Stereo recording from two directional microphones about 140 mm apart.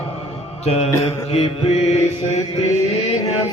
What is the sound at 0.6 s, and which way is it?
Mantra, 50° left (ahead or behind).